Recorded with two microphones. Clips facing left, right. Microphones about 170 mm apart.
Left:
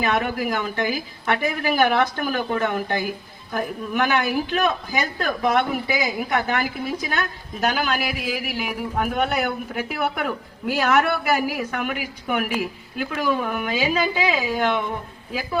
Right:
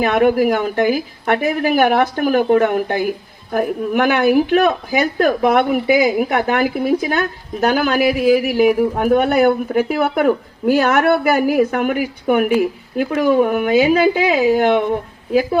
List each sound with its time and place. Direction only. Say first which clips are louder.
0.0 s speech: right 9 dB; 50° right (ahead or behind)